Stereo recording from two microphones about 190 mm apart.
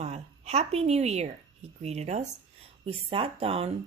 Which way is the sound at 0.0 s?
35° right (ahead or behind).